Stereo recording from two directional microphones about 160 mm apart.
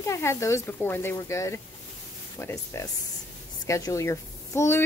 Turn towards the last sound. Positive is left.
turn(degrees=15)  # may be behind; listen again after turning